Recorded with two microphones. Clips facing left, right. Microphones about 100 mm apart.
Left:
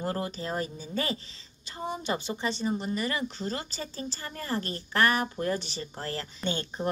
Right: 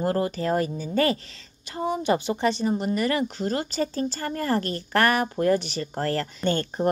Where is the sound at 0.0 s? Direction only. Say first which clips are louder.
Right 8 dB; 50° right (ahead or behind).